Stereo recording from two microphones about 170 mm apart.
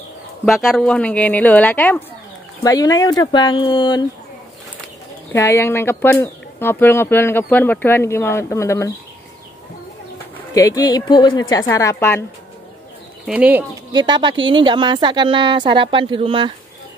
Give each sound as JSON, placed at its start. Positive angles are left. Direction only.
{"t": 0.5, "sound": "speech", "side_deg": 0}
{"t": 2.6, "sound": "speech", "side_deg": 20}
{"t": 5.3, "sound": "speech", "side_deg": 15}
{"t": 10.3, "sound": "speech", "side_deg": 20}
{"t": 13.3, "sound": "speech", "side_deg": -10}
{"t": 13.9, "sound": "a woman's voice", "side_deg": -25}